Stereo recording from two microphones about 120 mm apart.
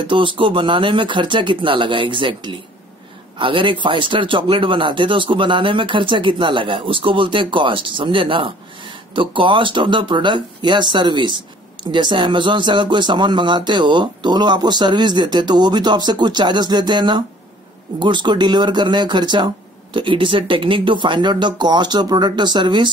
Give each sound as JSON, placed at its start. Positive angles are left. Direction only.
{"t": 0.0, "sound": "speech", "side_deg": -45}